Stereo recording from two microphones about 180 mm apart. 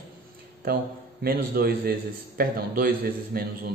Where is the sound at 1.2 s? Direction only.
60° right (ahead or behind).